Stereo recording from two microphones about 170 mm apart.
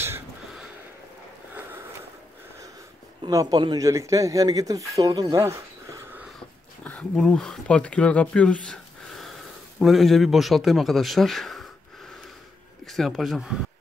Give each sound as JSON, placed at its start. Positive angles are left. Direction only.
{"t": 3.3, "sound": "speech", "side_deg": -20}
{"t": 6.8, "sound": "speech", "side_deg": 5}
{"t": 9.8, "sound": "a man's voice", "side_deg": 0}
{"t": 12.8, "sound": "a man's voice", "side_deg": 0}